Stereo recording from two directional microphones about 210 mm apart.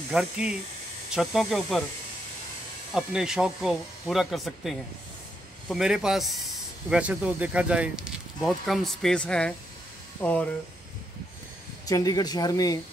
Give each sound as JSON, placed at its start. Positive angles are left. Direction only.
{"t": 0.1, "sound": "speech", "side_deg": -5}
{"t": 2.9, "sound": "speech", "side_deg": -5}
{"t": 11.8, "sound": "speech", "side_deg": 15}